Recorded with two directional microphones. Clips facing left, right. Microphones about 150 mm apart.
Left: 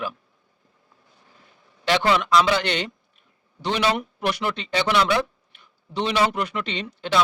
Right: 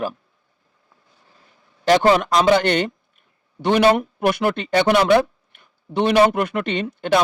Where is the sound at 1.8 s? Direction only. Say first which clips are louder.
Right 6 dB; 45° right (ahead or behind).